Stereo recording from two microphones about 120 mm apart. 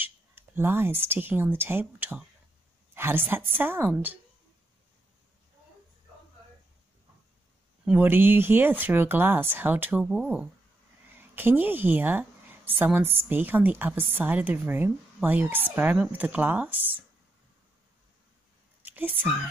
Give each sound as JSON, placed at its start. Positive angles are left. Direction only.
{"t": 0.0, "sound": "a woman's voice", "side_deg": -20}
{"t": 7.8, "sound": "a woman's voice", "side_deg": -15}
{"t": 18.9, "sound": "speech", "side_deg": -15}